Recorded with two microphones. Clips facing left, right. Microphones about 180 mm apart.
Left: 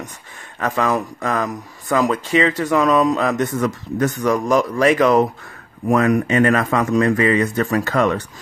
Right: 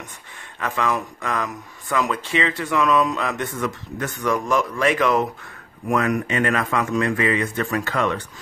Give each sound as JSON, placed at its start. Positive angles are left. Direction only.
{"t": 0.6, "sound": "speech", "side_deg": 40}